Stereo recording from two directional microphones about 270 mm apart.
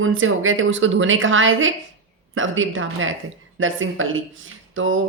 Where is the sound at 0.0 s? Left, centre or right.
Right.